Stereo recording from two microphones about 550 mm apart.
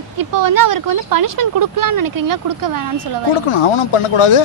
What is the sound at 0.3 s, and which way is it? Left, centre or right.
Speech, right.